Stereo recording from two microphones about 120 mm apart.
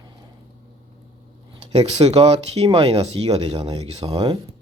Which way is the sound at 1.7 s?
60° right (ahead or behind).